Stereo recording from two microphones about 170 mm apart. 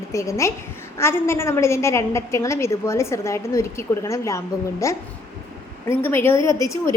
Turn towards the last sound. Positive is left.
turn(degrees=20)  # may be behind; listen again after turning